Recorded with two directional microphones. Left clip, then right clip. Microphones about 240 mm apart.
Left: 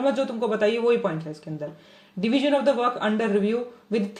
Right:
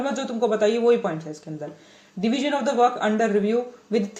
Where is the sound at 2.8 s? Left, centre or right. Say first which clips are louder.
Right 4 dB; left.